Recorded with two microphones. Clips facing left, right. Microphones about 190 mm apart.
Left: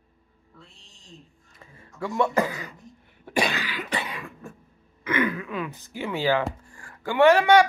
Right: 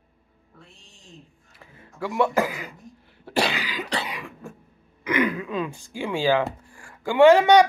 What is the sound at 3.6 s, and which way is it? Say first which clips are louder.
Cough: right 1 dB; 10° right (ahead or behind).